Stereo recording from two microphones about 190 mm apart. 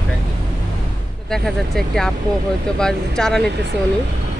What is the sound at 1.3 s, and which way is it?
Speech, centre (ahead or behind).